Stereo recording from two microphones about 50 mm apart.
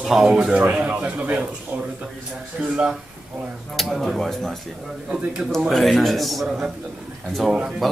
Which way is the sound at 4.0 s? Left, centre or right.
Centre.